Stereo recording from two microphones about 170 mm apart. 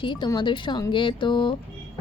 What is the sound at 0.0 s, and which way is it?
Speech, 30° left (ahead or behind).